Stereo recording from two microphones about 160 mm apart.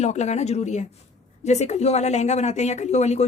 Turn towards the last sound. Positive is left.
turn(degrees=45)  # may be behind; listen again after turning